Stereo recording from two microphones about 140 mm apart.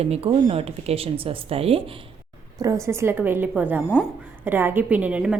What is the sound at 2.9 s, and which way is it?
A woman's voice, 20° right (ahead or behind).